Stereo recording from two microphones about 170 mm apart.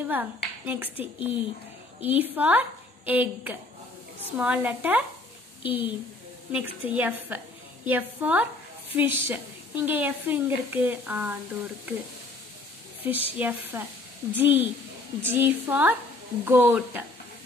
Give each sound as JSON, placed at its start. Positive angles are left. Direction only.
{"t": 0.1, "sound": "a woman's voice", "side_deg": -10}
{"t": 13.0, "sound": "a woman's voice", "side_deg": -10}